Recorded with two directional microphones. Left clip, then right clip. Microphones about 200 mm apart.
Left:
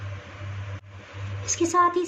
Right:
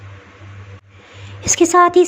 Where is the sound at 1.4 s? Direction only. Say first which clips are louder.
Right 9 dB; 40° right (ahead or behind).